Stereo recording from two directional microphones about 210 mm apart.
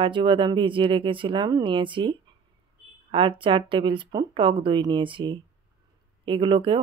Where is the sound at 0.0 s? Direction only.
25° right (ahead or behind).